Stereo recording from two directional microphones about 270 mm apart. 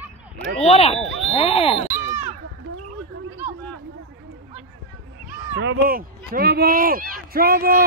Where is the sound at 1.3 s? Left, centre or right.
Left.